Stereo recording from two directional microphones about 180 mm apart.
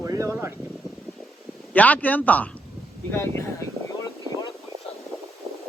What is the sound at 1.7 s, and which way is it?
Speech, 10° left (ahead or behind).